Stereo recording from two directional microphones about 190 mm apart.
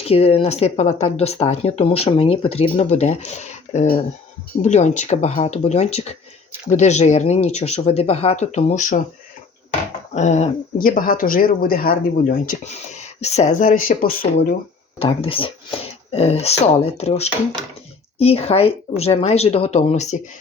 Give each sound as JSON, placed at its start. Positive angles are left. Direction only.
{"t": 0.0, "sound": "speech", "side_deg": 30}
{"t": 10.2, "sound": "speech", "side_deg": 35}
{"t": 13.1, "sound": "speech", "side_deg": 35}
{"t": 14.9, "sound": "speech", "side_deg": 30}